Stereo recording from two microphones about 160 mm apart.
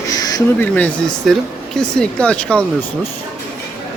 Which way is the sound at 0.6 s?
10° left (ahead or behind).